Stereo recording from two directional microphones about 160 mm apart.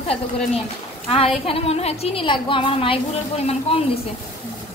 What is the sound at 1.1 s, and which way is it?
A woman's voice, 35° left (ahead or behind).